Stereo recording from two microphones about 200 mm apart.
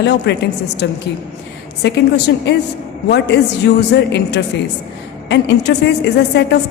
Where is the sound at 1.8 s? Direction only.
55° left (ahead or behind).